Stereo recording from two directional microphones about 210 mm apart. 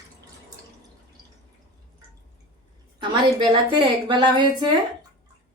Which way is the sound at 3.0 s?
20° right (ahead or behind).